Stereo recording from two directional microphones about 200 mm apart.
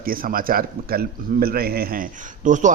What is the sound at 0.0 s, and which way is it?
A man's voice, 45° right (ahead or behind).